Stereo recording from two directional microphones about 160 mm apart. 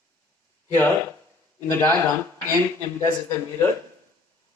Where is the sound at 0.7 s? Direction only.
15° left (ahead or behind).